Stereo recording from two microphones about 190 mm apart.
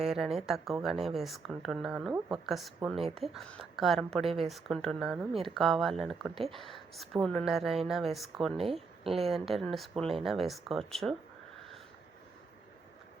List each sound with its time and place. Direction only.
0.0 s speech: centre (ahead or behind)